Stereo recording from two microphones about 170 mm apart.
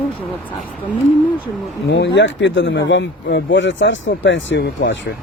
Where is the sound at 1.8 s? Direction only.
90° left.